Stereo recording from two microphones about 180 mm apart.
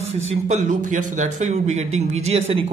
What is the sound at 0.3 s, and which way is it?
A man's voice, 45° right (ahead or behind).